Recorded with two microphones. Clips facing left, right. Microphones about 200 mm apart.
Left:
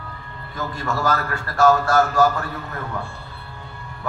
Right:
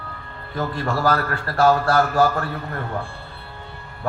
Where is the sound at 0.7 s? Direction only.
45° left (ahead or behind).